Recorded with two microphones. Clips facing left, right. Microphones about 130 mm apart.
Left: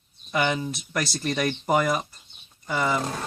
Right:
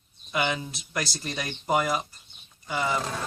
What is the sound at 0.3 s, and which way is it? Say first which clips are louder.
Speech: left 3 dB; 45° left (ahead or behind).